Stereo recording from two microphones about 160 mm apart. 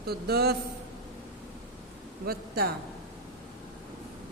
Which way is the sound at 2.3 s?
70° right (ahead or behind).